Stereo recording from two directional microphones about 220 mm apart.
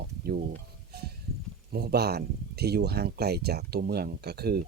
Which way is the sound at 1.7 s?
45° right (ahead or behind).